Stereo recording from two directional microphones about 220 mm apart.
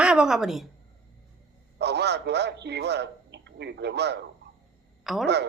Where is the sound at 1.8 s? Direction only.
50° right (ahead or behind).